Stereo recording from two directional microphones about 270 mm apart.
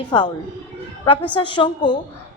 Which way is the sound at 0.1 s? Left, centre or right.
Centre.